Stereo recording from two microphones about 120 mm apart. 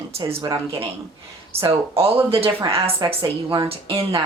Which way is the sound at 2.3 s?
50° right (ahead or behind).